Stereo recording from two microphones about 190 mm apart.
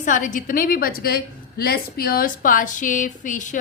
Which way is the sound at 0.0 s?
45° left (ahead or behind).